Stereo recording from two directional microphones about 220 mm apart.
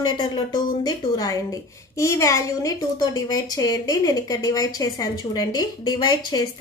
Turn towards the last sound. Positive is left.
turn(degrees=20)  # may be behind; listen again after turning